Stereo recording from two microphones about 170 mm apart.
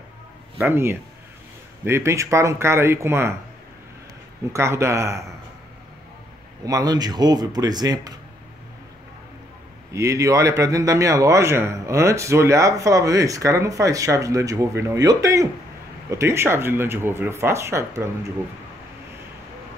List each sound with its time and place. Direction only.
0.7 s speech: 15° right (ahead or behind)
4.5 s speech: 15° right (ahead or behind)
6.6 s speech: 20° right (ahead or behind)
9.9 s speech: 20° right (ahead or behind)